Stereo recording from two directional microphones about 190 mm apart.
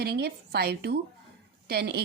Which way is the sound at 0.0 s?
55° right (ahead or behind).